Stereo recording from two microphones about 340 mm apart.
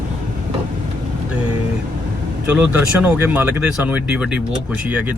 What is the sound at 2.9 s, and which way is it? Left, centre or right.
Speech, centre.